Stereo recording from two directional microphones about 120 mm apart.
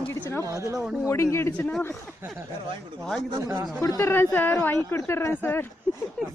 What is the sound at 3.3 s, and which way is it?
Speech, 30° right (ahead or behind).